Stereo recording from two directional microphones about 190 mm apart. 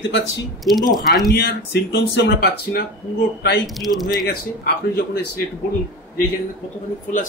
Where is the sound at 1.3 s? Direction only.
55° left (ahead or behind).